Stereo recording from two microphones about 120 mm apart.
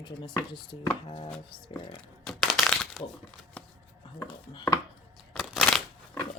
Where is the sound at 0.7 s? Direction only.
40° left (ahead or behind).